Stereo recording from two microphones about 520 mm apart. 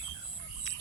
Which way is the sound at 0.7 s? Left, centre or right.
Left.